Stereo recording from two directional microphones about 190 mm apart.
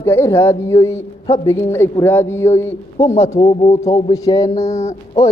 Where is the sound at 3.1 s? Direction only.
35° left (ahead or behind).